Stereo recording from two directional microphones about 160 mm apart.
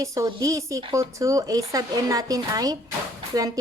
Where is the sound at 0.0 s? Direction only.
20° right (ahead or behind).